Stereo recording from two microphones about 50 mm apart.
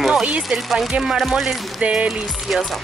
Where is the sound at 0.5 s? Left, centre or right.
Centre.